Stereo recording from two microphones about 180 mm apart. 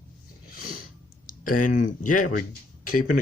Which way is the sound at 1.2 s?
50° left (ahead or behind).